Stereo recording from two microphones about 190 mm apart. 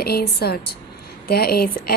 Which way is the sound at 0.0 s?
55° left (ahead or behind).